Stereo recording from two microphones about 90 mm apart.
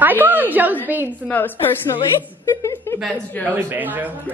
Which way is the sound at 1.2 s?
20° left (ahead or behind).